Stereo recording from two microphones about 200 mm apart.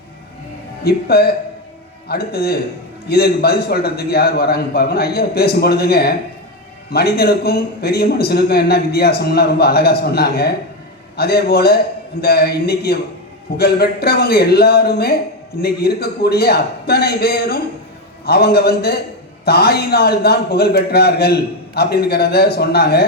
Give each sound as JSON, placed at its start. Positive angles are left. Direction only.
{"t": 0.9, "sound": "a man's voice", "side_deg": 50}